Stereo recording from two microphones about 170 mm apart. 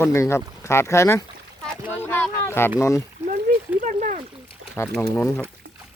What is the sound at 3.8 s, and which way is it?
Speech, 50° right (ahead or behind).